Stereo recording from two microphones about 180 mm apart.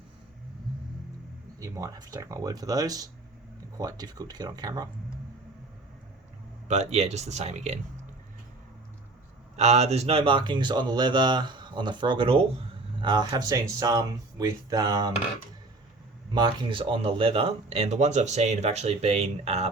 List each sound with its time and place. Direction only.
1.5 s speech: 15° right (ahead or behind)
6.7 s speech: 35° right (ahead or behind)
9.6 s speech: 35° right (ahead or behind); by 15.1 s 20° right (ahead or behind)
16.3 s speech: 25° right (ahead or behind)